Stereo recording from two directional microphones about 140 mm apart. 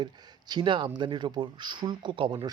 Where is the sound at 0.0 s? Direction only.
30° right (ahead or behind).